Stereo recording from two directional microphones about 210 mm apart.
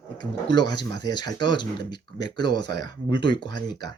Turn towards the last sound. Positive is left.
turn(degrees=20)  # may be behind; listen again after turning